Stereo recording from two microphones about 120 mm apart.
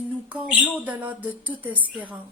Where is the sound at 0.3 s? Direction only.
10° right (ahead or behind).